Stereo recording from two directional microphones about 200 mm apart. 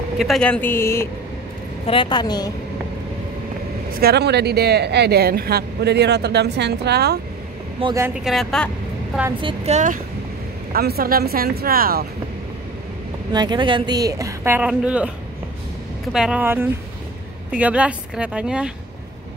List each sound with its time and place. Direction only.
0.2 s speech: 5° left (ahead or behind)
1.9 s a woman's voice: 25° left (ahead or behind)
3.9 s speech: 50° right (ahead or behind)
7.8 s a woman's voice: 15° right (ahead or behind)
8.2 s a woman's voice: centre (ahead or behind)
9.4 s a woman's voice: 25° right (ahead or behind)
10.7 s speech: 50° right (ahead or behind)
13.3 s a woman's voice: 20° right (ahead or behind)
16.1 s a woman's voice: 5° right (ahead or behind)